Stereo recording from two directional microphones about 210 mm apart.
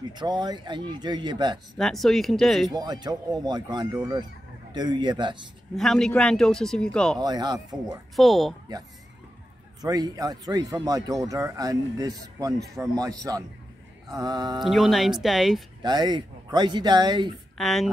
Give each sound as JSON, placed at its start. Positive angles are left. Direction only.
{"t": 0.1, "sound": "speech", "side_deg": -20}
{"t": 1.8, "sound": "speech", "side_deg": 0}
{"t": 2.7, "sound": "speech", "side_deg": -20}
{"t": 5.8, "sound": "speech", "side_deg": 0}
{"t": 7.2, "sound": "speech", "side_deg": -20}
{"t": 8.2, "sound": "speech", "side_deg": 0}
{"t": 9.8, "sound": "speech", "side_deg": -20}
{"t": 14.6, "sound": "speech", "side_deg": 0}
{"t": 15.8, "sound": "speech", "side_deg": -20}
{"t": 17.6, "sound": "speech", "side_deg": 0}